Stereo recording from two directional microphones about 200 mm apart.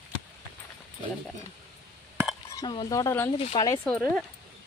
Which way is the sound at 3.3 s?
30° left (ahead or behind).